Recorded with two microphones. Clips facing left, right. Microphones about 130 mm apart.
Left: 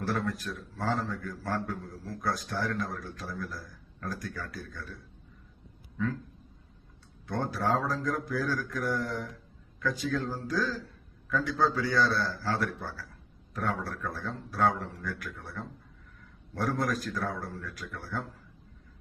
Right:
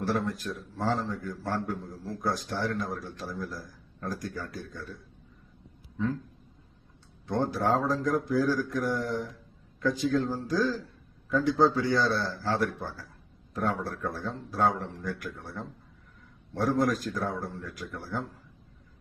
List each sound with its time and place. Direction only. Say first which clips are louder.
0.0 s a man's voice: right 2 dB; 25° right (ahead or behind)
7.3 s a man's voice: right 3 dB; 25° right (ahead or behind)
10.2 s speech: right 3 dB; 10° right (ahead or behind)
10.5 s a man's voice: right 4 dB; 25° right (ahead or behind)